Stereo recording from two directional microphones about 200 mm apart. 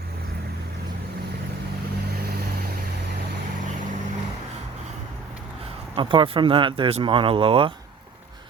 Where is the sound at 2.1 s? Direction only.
50° right (ahead or behind).